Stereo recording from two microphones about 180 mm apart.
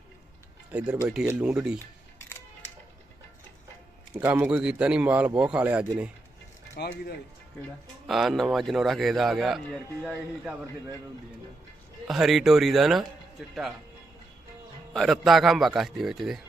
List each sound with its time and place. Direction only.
0.7 s a man's voice: 5° right (ahead or behind)
4.1 s a man's voice: 10° right (ahead or behind)
6.7 s speech: 60° left (ahead or behind)
8.0 s a man's voice: centre (ahead or behind)
12.0 s a man's voice: centre (ahead or behind)
14.9 s a man's voice: centre (ahead or behind)